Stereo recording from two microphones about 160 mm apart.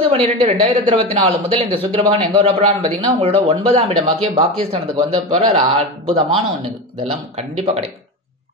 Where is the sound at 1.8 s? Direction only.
35° right (ahead or behind).